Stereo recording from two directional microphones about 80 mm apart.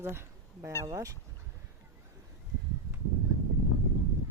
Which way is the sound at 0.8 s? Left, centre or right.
Right.